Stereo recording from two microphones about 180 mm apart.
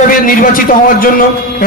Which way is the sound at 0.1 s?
50° left (ahead or behind).